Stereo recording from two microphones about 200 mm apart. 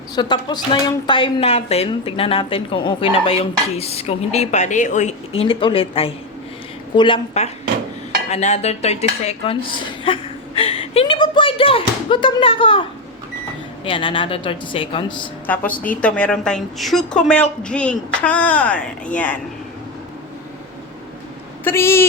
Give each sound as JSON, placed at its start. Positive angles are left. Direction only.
{"t": 0.2, "sound": "speech", "side_deg": 20}
{"t": 5.4, "sound": "speech", "side_deg": 25}
{"t": 8.3, "sound": "dishes", "side_deg": 35}
{"t": 13.8, "sound": "speech", "side_deg": 25}
{"t": 15.4, "sound": "a woman's voice", "side_deg": 10}
{"t": 21.6, "sound": "speech", "side_deg": 10}